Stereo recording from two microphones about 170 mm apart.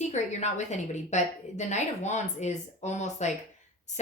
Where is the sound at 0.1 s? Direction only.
45° left (ahead or behind).